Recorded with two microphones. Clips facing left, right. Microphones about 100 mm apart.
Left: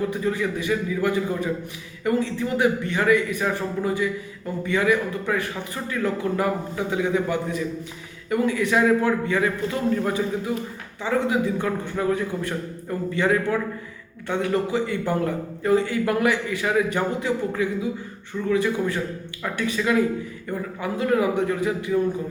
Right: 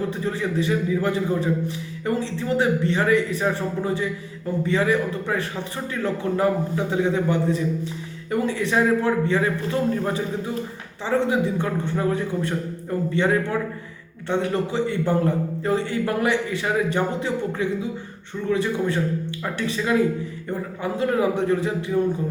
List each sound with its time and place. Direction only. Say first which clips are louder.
0.1 s a man's voice: left 1 dB; 30° right (ahead or behind)